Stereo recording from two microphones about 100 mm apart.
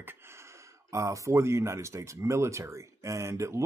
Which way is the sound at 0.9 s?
30° right (ahead or behind).